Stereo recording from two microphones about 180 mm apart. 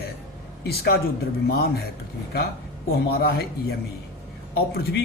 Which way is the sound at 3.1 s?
60° left (ahead or behind).